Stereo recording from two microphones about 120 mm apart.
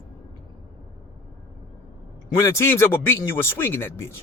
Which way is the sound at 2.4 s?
25° left (ahead or behind).